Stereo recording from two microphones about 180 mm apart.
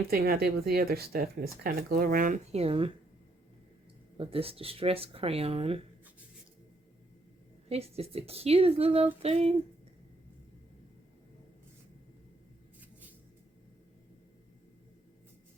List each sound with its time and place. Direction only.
0.1 s speech: 55° right (ahead or behind); by 2.9 s 30° right (ahead or behind)
4.2 s speech: 30° right (ahead or behind)
7.7 s speech: 35° right (ahead or behind)